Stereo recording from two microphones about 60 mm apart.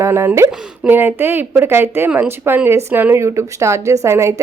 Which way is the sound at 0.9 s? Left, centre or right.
Right.